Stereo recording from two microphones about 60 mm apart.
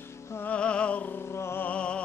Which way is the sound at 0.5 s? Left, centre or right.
Centre.